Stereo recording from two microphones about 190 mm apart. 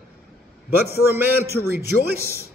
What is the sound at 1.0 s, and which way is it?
Speech, 10° right (ahead or behind).